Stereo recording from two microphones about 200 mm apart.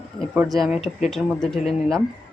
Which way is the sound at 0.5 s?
Centre (ahead or behind).